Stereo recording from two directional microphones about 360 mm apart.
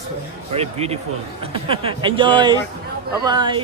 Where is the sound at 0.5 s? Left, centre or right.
Centre.